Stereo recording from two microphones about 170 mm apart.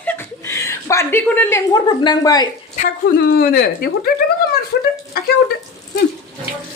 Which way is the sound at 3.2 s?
65° left (ahead or behind).